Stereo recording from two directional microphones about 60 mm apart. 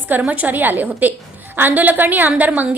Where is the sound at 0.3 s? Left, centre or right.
Right.